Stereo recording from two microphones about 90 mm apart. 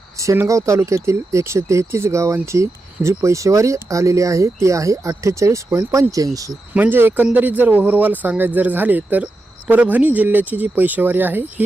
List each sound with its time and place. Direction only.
0.2 s speech: 35° right (ahead or behind)
6.7 s speech: 20° right (ahead or behind)